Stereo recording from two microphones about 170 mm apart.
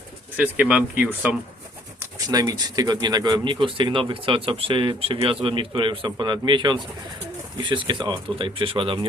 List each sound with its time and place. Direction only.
0.3 s speech: 10° right (ahead or behind)
2.0 s speech: 20° right (ahead or behind)